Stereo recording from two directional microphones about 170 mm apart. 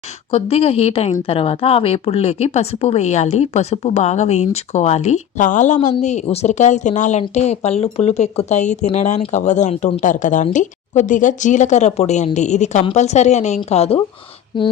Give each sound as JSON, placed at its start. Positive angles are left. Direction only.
{"t": 0.3, "sound": "speech", "side_deg": 35}